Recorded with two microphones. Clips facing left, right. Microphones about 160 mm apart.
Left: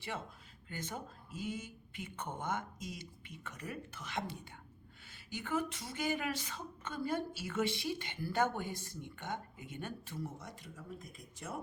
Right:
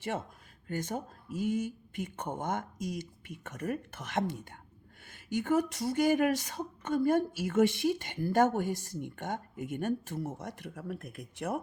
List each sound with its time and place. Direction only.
0.7 s speech: 50° right (ahead or behind)